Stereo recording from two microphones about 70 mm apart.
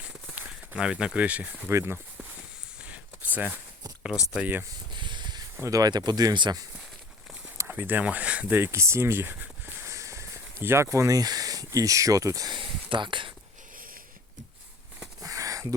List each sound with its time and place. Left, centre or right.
0.8 s speech: centre
1.7 s speech: right
2.8 s a sound: right
4.0 s speech: centre
4.9 s a sound: right
5.5 s speech: right
7.7 s speech: right
8.7 s speech: right
9.8 s a sound: right
10.6 s speech: right
10.8 s speech: right
15.2 s a sound: right